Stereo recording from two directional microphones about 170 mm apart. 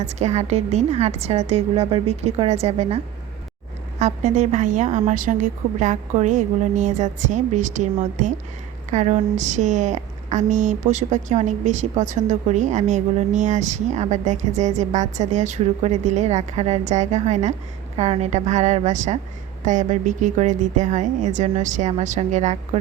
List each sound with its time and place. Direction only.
0.0 s a woman's voice: 40° right (ahead or behind)
4.0 s a woman's voice: 45° right (ahead or behind)